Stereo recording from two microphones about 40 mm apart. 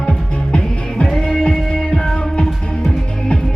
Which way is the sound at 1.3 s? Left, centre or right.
Centre.